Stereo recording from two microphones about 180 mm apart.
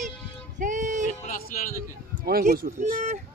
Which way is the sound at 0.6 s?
45° right (ahead or behind).